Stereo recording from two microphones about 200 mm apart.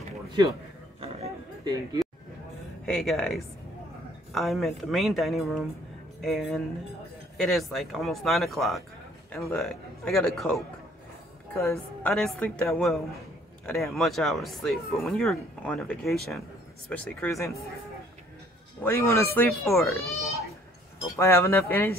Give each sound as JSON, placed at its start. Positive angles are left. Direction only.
{"t": 1.0, "sound": "a sound", "side_deg": -30}
{"t": 2.8, "sound": "a woman's voice", "side_deg": 0}
{"t": 18.8, "sound": "speech", "side_deg": 15}
{"t": 21.2, "sound": "speech", "side_deg": 15}